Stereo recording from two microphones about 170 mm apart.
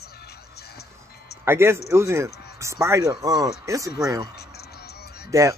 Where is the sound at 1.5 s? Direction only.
15° right (ahead or behind).